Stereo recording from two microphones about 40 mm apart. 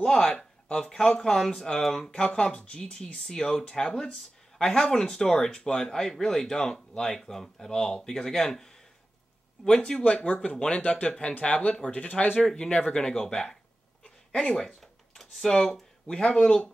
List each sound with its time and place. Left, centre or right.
0.0 s speech: centre
2.1 s speech: left
9.9 s speech: centre
10.2 s speech: left
12.5 s speech: left
14.0 s a sound: left
14.8 s typing: centre
16.1 s speech: left